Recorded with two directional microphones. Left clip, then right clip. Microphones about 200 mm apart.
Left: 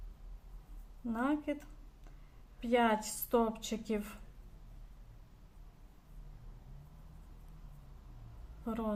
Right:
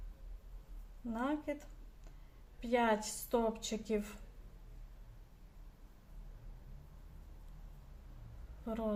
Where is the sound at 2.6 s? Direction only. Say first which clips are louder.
Left 2 dB; 25° left (ahead or behind).